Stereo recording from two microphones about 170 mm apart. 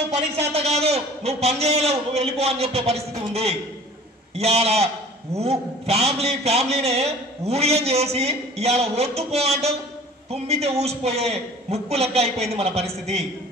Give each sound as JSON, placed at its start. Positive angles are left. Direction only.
{"t": 0.1, "sound": "a man's voice", "side_deg": -40}